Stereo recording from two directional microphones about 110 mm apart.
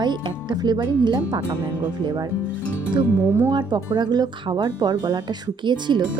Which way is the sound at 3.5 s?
40° right (ahead or behind).